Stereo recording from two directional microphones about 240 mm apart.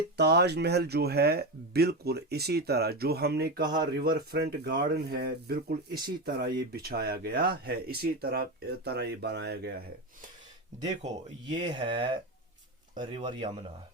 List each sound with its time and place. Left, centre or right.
0.2 s speech: right
11.0 s speech: centre